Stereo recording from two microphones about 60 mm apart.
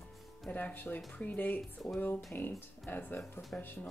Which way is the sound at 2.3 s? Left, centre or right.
Left.